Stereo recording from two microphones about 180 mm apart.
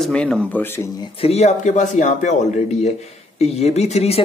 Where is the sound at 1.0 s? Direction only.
35° left (ahead or behind).